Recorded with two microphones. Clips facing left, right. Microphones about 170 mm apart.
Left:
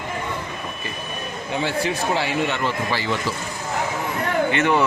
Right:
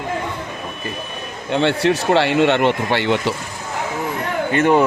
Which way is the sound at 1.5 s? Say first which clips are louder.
Right 7 dB; 70° right (ahead or behind).